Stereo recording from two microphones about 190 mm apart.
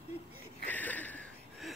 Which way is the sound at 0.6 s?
10° left (ahead or behind).